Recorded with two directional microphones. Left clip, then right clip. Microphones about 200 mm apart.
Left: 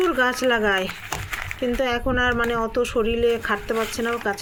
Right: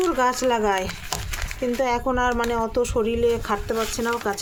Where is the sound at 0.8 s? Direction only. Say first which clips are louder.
Left 1 dB; 15° right (ahead or behind).